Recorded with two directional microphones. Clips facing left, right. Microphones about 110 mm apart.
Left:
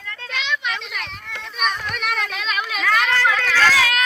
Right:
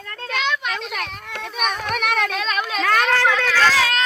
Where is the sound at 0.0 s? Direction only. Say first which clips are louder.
Right 5 dB; 45° right (ahead or behind).